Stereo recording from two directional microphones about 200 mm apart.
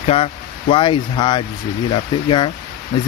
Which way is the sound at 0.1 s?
30° left (ahead or behind).